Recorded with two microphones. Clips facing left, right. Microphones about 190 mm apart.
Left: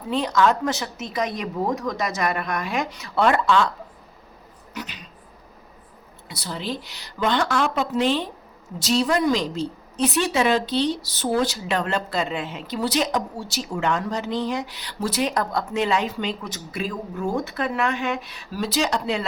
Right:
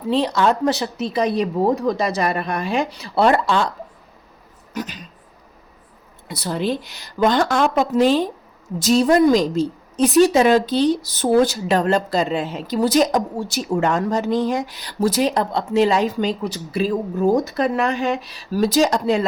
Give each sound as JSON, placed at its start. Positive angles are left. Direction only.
{"t": 0.1, "sound": "a woman's voice", "side_deg": -30}
{"t": 4.7, "sound": "a sound", "side_deg": -45}
{"t": 6.2, "sound": "speech", "side_deg": -55}
{"t": 7.2, "sound": "a woman's voice", "side_deg": -40}